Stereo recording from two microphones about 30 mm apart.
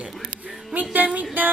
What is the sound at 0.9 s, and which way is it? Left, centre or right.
Speech, right.